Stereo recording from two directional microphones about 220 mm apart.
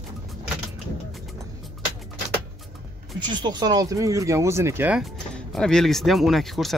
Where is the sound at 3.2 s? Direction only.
20° right (ahead or behind).